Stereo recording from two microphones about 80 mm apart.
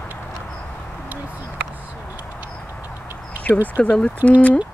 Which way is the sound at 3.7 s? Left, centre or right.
Centre.